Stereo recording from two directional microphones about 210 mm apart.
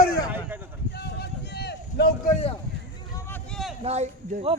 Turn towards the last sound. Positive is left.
turn(degrees=-30)  # may be behind; listen again after turning